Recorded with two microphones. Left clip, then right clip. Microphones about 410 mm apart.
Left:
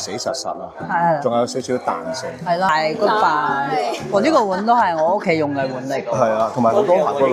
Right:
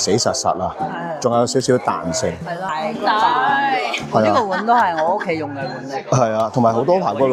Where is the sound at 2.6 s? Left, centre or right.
Left.